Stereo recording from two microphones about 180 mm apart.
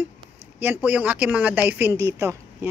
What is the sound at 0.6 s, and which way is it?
Speech, 10° right (ahead or behind).